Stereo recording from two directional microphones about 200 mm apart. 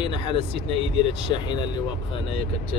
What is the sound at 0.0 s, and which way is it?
Speech, 25° left (ahead or behind).